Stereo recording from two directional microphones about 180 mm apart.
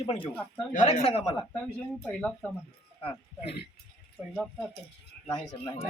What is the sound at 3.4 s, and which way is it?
Speech, 65° left (ahead or behind).